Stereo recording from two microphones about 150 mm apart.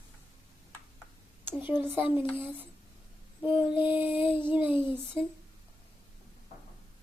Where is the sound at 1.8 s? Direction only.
10° right (ahead or behind).